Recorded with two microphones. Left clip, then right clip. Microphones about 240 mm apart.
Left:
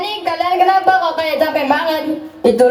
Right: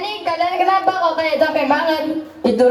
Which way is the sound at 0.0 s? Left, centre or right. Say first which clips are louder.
Left 1 dB; left.